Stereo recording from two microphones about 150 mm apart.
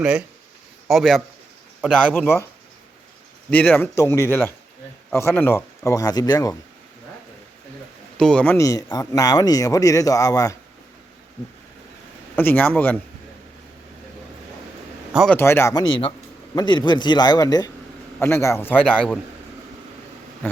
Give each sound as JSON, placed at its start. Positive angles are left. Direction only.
{"t": 0.0, "sound": "a man's voice", "side_deg": -5}
{"t": 2.1, "sound": "speech", "side_deg": 15}
{"t": 3.5, "sound": "speech", "side_deg": 10}
{"t": 8.2, "sound": "speech", "side_deg": 5}
{"t": 8.5, "sound": "speech", "side_deg": 20}
{"t": 12.4, "sound": "speech", "side_deg": 10}
{"t": 15.3, "sound": "speech", "side_deg": 15}
{"t": 15.7, "sound": "speech", "side_deg": 35}
{"t": 20.4, "sound": "speech", "side_deg": 10}